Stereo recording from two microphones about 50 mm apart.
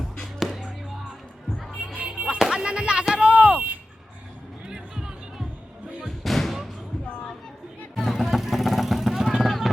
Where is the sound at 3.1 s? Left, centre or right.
Right.